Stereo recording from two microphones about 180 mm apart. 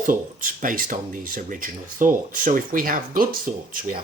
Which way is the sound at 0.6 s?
50° right (ahead or behind).